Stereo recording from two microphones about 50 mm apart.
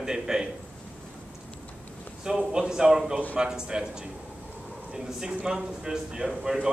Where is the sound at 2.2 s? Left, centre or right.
Centre.